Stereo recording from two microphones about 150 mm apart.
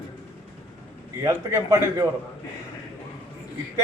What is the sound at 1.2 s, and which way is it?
Speech, 15° right (ahead or behind).